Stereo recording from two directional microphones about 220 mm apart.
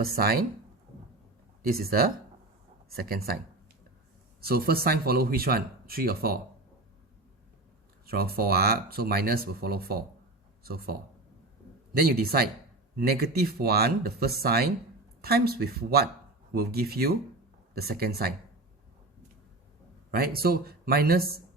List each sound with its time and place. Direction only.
0.0 s speech: 45° right (ahead or behind)
1.6 s speech: 45° right (ahead or behind)
4.4 s speech: 45° right (ahead or behind)
8.0 s speech: 45° right (ahead or behind)
11.9 s speech: 45° right (ahead or behind)
20.1 s speech: 45° right (ahead or behind)